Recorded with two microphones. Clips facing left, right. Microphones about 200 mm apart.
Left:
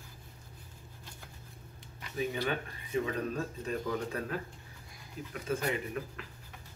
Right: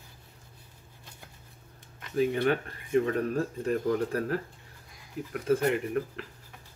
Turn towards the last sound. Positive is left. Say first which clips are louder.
# right 8 dB
turn(degrees=-55)  # may be behind; listen again after turning